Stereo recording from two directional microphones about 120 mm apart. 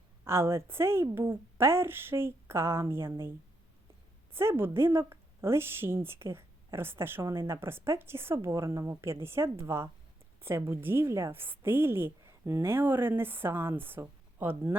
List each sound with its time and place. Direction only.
0.3 s speech: 20° right (ahead or behind)
4.4 s speech: 20° right (ahead or behind)